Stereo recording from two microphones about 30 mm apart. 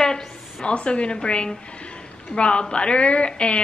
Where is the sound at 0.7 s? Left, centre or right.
Left.